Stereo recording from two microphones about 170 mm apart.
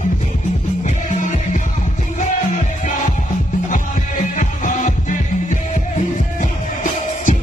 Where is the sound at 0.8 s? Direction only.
45° left (ahead or behind).